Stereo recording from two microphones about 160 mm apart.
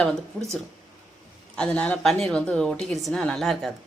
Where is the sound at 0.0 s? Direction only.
5° left (ahead or behind).